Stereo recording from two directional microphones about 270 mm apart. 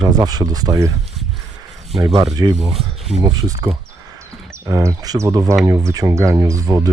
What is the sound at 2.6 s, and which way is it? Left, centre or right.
Speech, centre.